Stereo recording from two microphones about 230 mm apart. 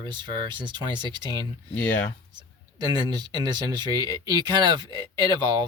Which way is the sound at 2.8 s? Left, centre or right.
Centre.